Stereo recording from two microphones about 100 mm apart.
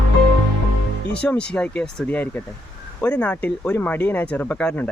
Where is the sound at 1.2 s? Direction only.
10° left (ahead or behind).